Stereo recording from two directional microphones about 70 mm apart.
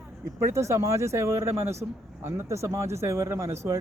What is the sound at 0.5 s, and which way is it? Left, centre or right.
Speech, right.